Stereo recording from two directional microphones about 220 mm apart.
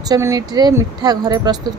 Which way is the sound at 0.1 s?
15° right (ahead or behind).